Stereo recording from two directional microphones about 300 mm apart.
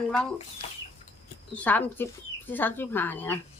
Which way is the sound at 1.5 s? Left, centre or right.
Centre.